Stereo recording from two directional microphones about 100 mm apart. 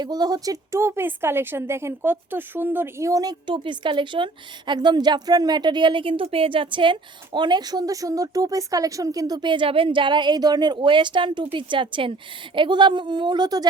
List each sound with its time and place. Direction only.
0.0 s speech: 40° right (ahead or behind)
3.4 s a woman's voice: 55° right (ahead or behind)